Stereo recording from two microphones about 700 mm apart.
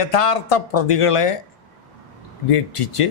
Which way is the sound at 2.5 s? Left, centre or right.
Left.